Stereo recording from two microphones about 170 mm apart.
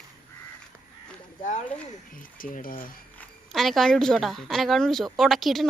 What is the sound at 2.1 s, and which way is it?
Speech, 55° left (ahead or behind).